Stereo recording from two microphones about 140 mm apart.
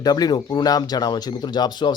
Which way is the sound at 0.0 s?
30° left (ahead or behind).